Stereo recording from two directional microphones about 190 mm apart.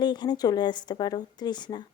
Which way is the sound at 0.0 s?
25° left (ahead or behind).